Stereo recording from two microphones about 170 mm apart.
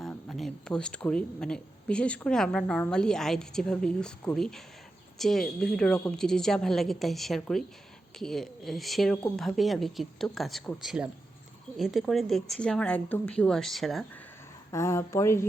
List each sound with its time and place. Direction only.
0.0 s a woman's voice: centre (ahead or behind)
14.7 s speech: 15° left (ahead or behind)